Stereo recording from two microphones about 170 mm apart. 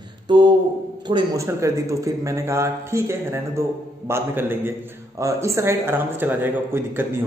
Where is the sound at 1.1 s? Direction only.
25° right (ahead or behind).